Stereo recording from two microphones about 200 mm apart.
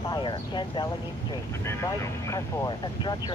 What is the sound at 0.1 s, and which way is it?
Speech, 20° left (ahead or behind).